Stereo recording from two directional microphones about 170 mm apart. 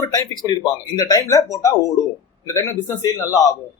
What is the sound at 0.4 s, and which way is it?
A man's voice, 25° left (ahead or behind).